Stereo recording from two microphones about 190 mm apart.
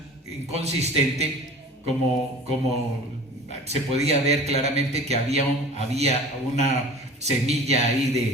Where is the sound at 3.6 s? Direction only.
35° right (ahead or behind).